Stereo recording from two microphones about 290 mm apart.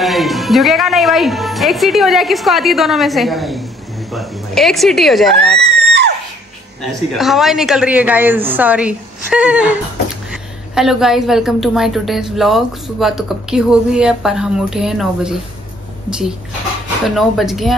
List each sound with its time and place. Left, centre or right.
0.0 s a woman's voice: centre
5.6 s a sound: right
6.9 s a woman's voice: centre